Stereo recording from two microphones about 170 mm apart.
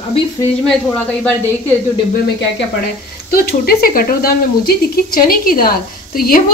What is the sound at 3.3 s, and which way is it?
Speech, 65° left (ahead or behind).